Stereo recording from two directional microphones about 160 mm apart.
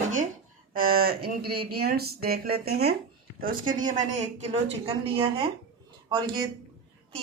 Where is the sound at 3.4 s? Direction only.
60° right (ahead or behind).